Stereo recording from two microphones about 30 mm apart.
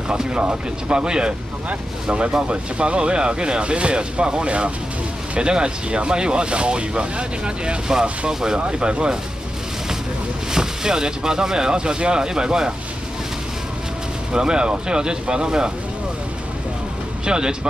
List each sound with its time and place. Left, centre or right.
0.4 s speech: right
4.5 s speech: right
5.4 s speech: right
8.3 s speech: centre
8.7 s speech: right
10.5 s speech: right
14.3 s speech: right
17.2 s speech: right